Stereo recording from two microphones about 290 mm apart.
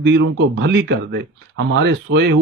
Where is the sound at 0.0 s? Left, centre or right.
Right.